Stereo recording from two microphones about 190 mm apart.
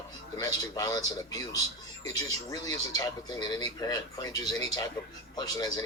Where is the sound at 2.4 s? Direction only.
20° left (ahead or behind).